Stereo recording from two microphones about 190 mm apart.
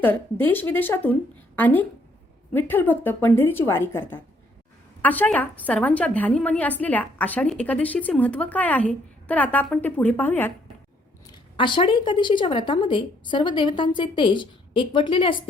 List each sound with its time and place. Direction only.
0.0 s a woman's voice: 10° left (ahead or behind)
11.5 s a woman's voice: 25° left (ahead or behind)